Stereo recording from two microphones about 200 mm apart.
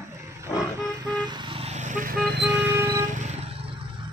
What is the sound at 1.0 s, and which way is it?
Vehicle, 20° right (ahead or behind).